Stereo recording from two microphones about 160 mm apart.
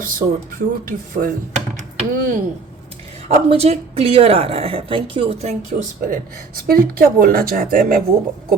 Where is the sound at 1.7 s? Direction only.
50° right (ahead or behind).